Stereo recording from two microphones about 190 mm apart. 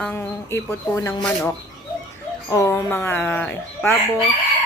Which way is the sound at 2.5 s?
15° left (ahead or behind).